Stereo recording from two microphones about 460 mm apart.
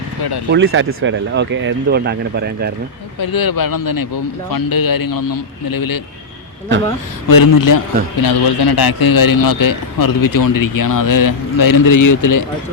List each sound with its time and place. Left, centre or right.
0.2 s speech: left
0.5 s speech: right
3.2 s speech: left
7.3 s speech: left